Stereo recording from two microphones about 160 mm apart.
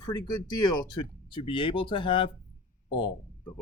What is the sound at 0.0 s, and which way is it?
Speech, 25° left (ahead or behind).